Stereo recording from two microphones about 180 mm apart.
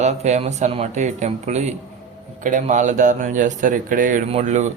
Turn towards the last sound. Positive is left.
turn(degrees=-40)  # may be behind; listen again after turning